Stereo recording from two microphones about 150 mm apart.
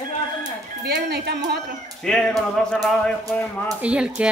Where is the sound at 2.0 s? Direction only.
5° left (ahead or behind).